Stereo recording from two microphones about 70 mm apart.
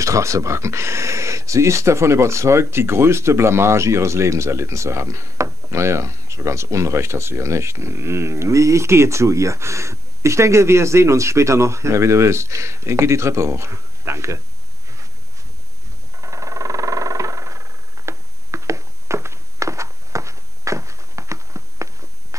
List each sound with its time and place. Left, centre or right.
0.0 s speech: right
16.2 s vehicle: right